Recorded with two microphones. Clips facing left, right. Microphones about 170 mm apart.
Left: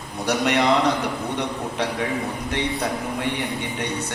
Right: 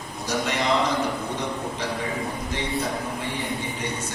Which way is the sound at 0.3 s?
65° left (ahead or behind).